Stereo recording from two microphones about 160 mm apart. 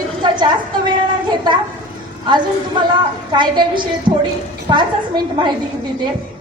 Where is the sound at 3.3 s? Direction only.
30° right (ahead or behind).